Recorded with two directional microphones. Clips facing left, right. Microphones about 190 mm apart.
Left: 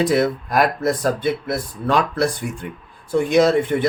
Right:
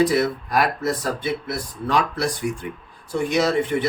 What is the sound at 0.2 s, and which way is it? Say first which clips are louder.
Speech: left 3 dB; 55° left (ahead or behind).